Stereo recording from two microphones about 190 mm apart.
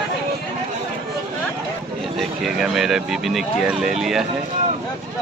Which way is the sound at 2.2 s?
Centre (ahead or behind).